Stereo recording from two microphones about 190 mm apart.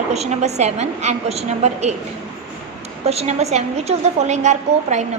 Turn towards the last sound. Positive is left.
turn(degrees=-35)  # may be behind; listen again after turning